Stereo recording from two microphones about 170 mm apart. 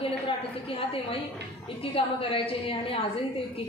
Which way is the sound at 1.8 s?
35° left (ahead or behind).